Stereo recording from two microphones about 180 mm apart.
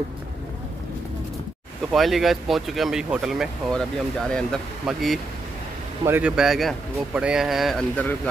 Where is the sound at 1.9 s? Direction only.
Centre (ahead or behind).